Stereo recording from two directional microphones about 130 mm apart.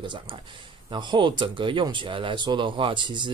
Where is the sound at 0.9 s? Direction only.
40° right (ahead or behind).